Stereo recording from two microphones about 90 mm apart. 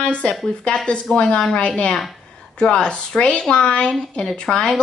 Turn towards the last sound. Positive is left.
turn(degrees=5)  # may be behind; listen again after turning